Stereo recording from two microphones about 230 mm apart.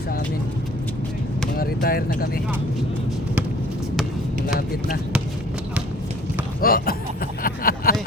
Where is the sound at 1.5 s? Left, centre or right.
Left.